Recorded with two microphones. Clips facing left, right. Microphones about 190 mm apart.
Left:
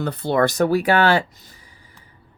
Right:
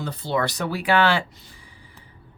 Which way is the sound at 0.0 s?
55° left (ahead or behind).